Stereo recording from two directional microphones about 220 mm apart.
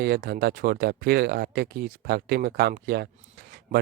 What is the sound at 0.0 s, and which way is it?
Speech, 45° right (ahead or behind).